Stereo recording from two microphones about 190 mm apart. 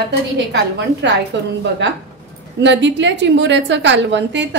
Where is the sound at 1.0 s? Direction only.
70° right (ahead or behind).